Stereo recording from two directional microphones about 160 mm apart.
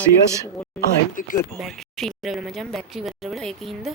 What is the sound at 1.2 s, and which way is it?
Speech, 55° left (ahead or behind).